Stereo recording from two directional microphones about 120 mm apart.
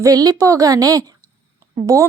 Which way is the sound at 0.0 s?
30° right (ahead or behind).